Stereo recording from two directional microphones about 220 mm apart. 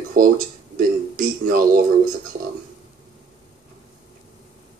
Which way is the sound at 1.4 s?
40° right (ahead or behind).